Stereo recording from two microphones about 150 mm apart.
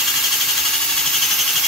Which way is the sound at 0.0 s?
Centre (ahead or behind).